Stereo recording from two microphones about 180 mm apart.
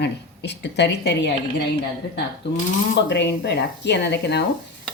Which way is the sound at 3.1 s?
75° left (ahead or behind).